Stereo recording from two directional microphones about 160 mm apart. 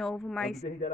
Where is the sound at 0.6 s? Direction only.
40° left (ahead or behind).